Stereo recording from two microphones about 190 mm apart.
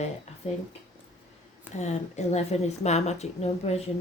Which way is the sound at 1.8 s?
35° left (ahead or behind).